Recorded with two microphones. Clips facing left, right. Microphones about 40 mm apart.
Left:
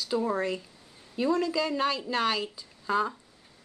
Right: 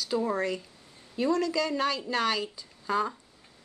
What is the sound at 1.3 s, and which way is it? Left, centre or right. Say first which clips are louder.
A woman's voice: even; centre.